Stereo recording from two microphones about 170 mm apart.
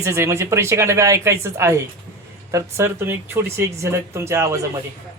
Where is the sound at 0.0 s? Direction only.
15° right (ahead or behind).